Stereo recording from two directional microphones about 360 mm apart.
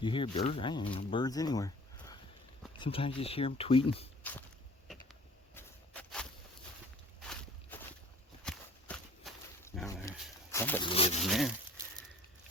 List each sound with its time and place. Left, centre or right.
0.0 s speech: centre
5.5 s a sound: centre
7.2 s walk: centre
11.2 s speech: centre